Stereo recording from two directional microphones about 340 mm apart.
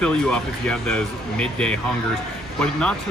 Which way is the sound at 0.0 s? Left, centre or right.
Centre.